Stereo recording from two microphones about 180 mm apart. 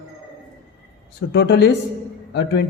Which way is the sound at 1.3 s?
70° left (ahead or behind).